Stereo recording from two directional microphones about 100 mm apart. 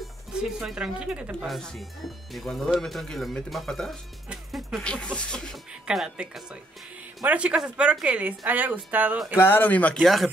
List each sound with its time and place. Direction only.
0.0 s speech: 5° right (ahead or behind)
1.5 s speech: centre (ahead or behind)
4.3 s music: 5° right (ahead or behind)
4.8 s speech: 10° left (ahead or behind)
5.7 s a woman's voice: 5° right (ahead or behind)
9.4 s speech: 20° left (ahead or behind)
9.9 s speech: centre (ahead or behind)